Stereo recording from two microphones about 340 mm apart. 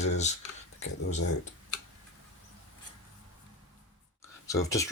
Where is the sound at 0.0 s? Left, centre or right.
Centre.